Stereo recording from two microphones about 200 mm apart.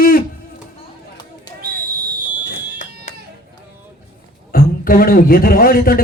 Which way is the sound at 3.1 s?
40° left (ahead or behind).